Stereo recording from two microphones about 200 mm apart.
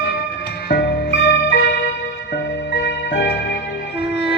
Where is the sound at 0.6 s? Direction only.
55° left (ahead or behind).